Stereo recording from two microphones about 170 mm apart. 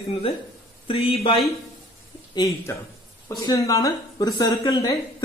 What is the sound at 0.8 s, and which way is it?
Speech, 35° left (ahead or behind).